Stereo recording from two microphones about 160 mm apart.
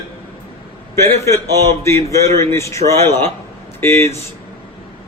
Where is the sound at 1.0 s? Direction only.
15° left (ahead or behind).